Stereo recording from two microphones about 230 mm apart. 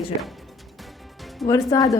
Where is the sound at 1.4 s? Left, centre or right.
Centre.